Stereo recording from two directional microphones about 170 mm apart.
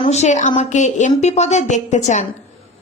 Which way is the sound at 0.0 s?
40° left (ahead or behind).